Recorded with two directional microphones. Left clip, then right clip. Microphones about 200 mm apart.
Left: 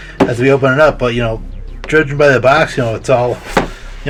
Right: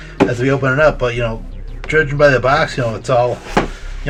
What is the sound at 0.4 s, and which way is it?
Speech, 35° left (ahead or behind).